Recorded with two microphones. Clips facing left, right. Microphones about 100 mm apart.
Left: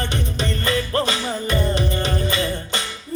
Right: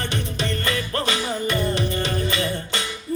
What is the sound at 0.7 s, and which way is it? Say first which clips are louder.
Music: left 6 dB; 25° left (ahead or behind).